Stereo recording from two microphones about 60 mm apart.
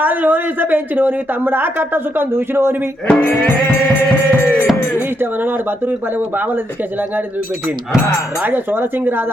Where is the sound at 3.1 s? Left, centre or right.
Left.